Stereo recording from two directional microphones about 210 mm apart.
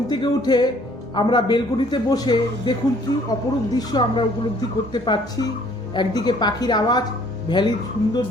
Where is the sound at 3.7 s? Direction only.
20° left (ahead or behind).